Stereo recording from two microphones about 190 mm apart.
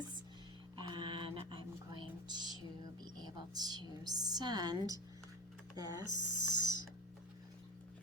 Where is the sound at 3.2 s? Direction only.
20° right (ahead or behind).